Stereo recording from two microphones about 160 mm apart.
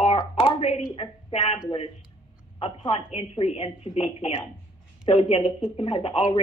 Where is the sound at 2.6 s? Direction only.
40° left (ahead or behind).